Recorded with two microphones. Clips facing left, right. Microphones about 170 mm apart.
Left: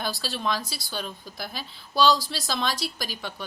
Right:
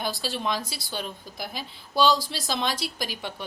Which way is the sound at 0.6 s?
25° right (ahead or behind).